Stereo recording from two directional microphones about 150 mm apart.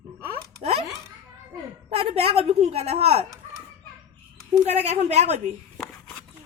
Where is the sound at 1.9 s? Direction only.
40° right (ahead or behind).